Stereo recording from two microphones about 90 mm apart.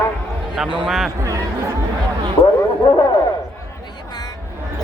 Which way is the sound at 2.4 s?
80° left.